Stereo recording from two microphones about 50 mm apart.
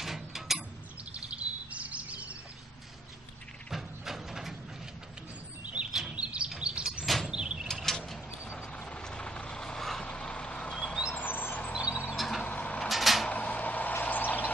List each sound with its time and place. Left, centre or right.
0.0 s mechanisms: centre
1.1 s chirp: right
3.7 s a sound: centre
6.1 s bird: right
6.6 s chirp: centre
7.2 s sliding door: centre
7.6 s pulleys: centre
8.7 s vehicle: left
10.0 s vehicle: centre
11.1 s vehicle: left
12.2 s vehicle: centre
12.4 s a sound: left
12.8 s a sound: centre
13.3 s vehicle: left